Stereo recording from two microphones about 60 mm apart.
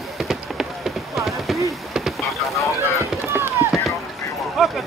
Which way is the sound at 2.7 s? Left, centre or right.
Right.